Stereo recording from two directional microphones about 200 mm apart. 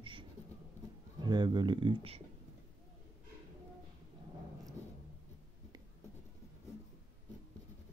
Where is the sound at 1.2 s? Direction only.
20° right (ahead or behind).